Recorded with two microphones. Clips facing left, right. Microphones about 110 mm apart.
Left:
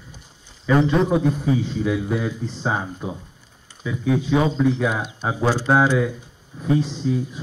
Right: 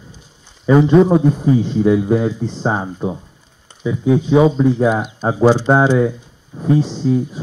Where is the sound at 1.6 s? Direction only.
35° right (ahead or behind).